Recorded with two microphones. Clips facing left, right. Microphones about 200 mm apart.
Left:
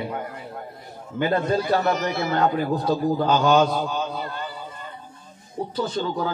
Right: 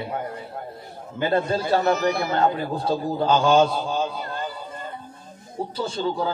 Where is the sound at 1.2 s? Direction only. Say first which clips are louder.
Left 1 dB; 30° right (ahead or behind).